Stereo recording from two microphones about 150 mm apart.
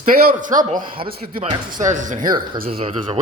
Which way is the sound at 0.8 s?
35° right (ahead or behind).